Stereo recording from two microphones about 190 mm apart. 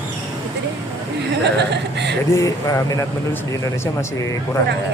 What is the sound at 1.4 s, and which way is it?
Speech, 65° right (ahead or behind).